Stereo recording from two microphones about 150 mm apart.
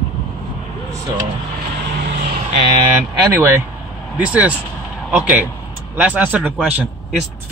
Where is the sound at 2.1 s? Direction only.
80° right.